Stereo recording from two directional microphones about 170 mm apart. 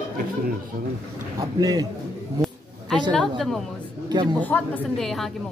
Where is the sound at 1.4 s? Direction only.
20° right (ahead or behind).